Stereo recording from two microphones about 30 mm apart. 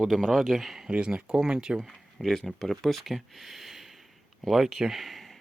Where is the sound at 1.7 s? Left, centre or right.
Centre.